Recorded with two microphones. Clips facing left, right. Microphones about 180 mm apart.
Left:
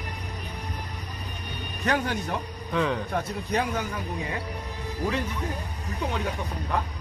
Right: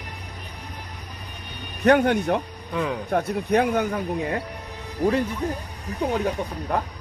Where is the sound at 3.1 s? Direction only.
60° right (ahead or behind).